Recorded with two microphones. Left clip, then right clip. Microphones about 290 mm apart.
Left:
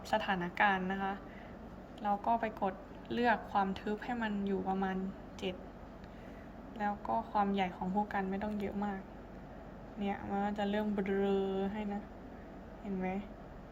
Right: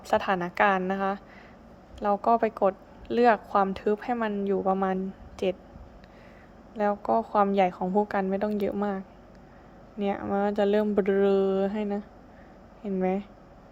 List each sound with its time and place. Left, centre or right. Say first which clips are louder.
0.1 s speech: right 9 dB; centre
6.7 s speech: right 10 dB; centre
10.0 s speech: right 10 dB; centre
13.0 s speech: right 12 dB; centre